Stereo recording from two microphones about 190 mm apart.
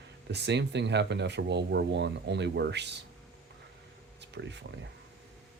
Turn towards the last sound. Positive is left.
turn(degrees=-65)  # may be behind; listen again after turning